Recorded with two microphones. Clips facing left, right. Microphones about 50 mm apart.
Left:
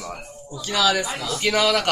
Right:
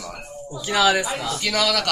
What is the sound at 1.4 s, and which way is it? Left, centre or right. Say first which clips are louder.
Speech: left 3 dB; left.